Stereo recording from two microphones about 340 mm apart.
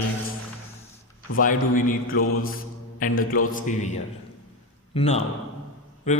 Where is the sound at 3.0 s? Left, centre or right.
Left.